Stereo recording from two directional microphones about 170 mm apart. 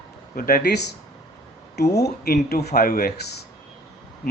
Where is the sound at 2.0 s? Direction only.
65° left (ahead or behind).